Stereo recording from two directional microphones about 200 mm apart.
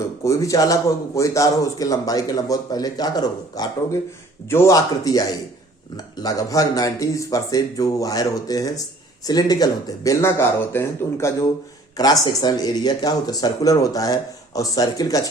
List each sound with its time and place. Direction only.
0.3 s speech: 15° left (ahead or behind)